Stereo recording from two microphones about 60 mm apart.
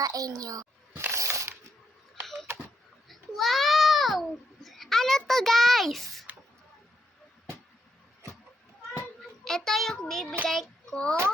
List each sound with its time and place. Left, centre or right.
0.0 s a child's voice: right
1.1 s ratchet: right
2.2 s typewriter: centre
3.1 s babbling: centre
9.4 s a child's voice: centre
10.5 s child singing: centre
10.9 s a child's voice: centre